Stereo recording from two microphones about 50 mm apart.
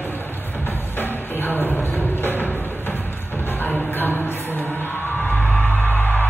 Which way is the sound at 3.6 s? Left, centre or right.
Left.